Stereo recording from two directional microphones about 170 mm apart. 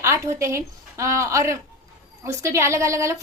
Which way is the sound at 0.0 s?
15° right (ahead or behind).